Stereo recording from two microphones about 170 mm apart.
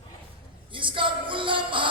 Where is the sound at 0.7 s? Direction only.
30° right (ahead or behind).